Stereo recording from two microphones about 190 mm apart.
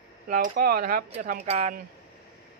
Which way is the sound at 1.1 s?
35° right (ahead or behind).